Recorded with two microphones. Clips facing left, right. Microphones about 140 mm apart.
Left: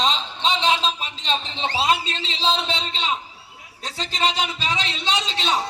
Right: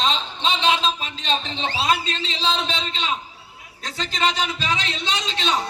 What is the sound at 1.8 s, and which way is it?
A man's voice, 25° left (ahead or behind).